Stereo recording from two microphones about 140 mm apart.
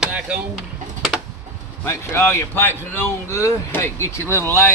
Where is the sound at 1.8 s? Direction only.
15° left (ahead or behind).